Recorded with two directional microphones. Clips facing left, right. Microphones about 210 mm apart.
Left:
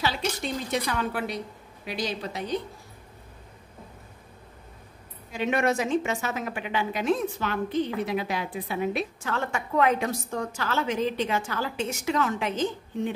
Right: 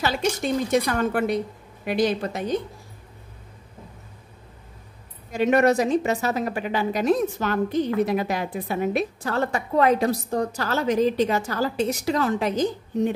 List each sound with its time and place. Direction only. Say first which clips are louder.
0.0 s a woman's voice: right 5 dB; 45° right (ahead or behind)
5.3 s a woman's voice: right 6 dB; 40° right (ahead or behind)